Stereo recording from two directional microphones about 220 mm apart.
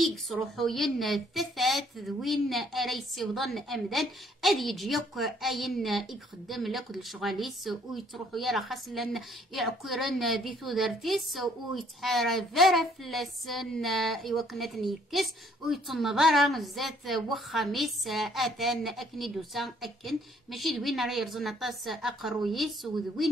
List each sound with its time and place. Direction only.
0.0 s speech: centre (ahead or behind)